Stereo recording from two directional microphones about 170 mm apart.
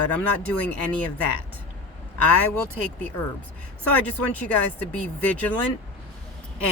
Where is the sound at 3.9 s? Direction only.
10° left (ahead or behind).